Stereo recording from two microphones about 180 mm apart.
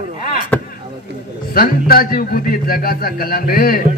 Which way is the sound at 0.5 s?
10° left (ahead or behind).